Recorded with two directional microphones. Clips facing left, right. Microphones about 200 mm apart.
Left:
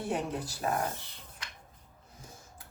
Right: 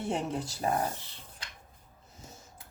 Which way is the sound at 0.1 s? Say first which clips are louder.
Right 1 dB; 25° right (ahead or behind).